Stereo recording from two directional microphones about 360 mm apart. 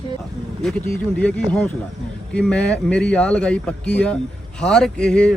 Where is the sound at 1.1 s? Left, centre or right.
Centre.